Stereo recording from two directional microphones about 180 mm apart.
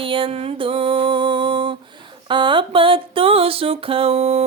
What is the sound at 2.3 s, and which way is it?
Music, 25° right (ahead or behind).